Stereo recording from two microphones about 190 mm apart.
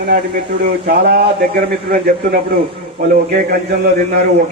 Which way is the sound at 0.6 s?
55° right (ahead or behind).